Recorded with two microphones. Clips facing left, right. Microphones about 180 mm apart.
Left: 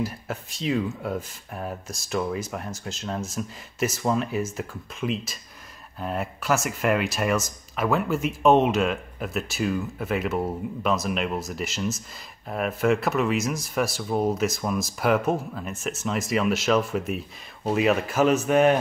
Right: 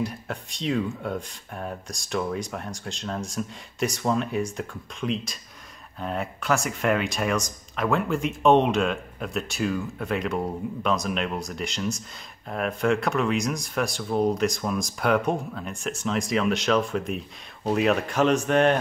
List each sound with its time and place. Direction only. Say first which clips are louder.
0.0 s speech: even; 5° left (ahead or behind)